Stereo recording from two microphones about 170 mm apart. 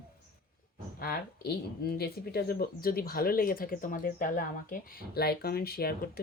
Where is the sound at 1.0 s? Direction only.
65° left (ahead or behind).